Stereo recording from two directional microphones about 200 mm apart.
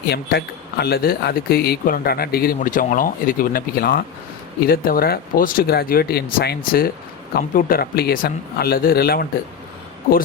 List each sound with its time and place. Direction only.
0.1 s a man's voice: 55° left (ahead or behind)